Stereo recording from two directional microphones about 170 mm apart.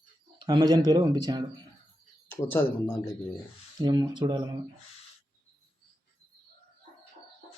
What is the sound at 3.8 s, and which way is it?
Speech, 25° right (ahead or behind).